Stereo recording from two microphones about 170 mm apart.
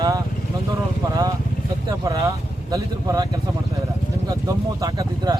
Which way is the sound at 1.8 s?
20° right (ahead or behind).